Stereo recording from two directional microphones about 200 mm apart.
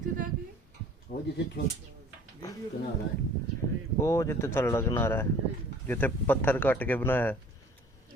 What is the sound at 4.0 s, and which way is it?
Speech, 15° left (ahead or behind).